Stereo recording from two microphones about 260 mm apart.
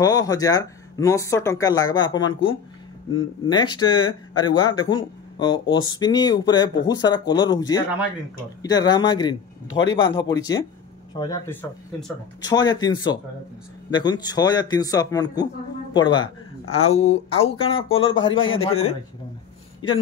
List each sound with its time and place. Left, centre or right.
0.0 s speech: centre
17.8 s a man's voice: left